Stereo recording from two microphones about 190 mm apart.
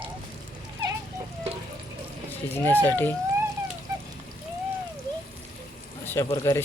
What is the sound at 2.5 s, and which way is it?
Speech, 10° left (ahead or behind).